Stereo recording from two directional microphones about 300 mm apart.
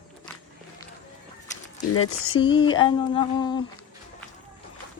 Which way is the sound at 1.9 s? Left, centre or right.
Left.